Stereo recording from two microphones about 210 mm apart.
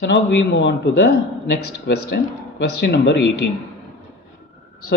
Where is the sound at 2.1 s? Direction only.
50° left (ahead or behind).